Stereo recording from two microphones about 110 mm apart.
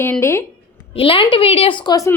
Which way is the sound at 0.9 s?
55° left (ahead or behind).